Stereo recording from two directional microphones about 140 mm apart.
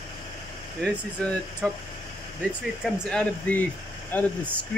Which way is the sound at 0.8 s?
Centre (ahead or behind).